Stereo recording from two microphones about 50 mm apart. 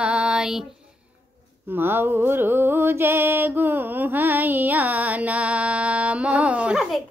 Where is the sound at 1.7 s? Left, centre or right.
Right.